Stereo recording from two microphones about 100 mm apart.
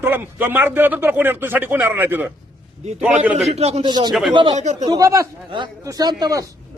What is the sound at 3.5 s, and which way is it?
Speech, 90° right.